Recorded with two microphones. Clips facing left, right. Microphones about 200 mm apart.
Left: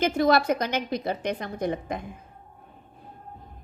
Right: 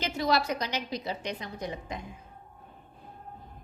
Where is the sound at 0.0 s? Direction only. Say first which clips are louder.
Left 7 dB; 55° left (ahead or behind).